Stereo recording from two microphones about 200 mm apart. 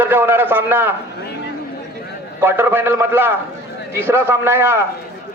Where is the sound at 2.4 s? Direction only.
10° right (ahead or behind).